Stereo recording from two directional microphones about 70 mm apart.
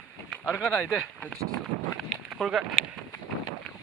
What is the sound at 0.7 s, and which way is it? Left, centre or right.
Speech, centre.